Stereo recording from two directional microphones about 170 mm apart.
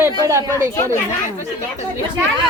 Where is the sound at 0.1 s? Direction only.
20° right (ahead or behind).